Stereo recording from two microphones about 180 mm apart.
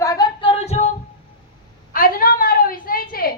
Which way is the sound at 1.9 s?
50° left (ahead or behind).